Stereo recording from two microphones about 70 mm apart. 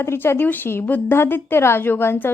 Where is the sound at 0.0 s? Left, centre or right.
Left.